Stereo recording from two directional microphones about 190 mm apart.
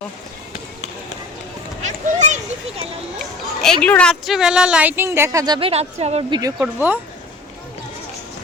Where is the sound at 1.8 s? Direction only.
40° right (ahead or behind).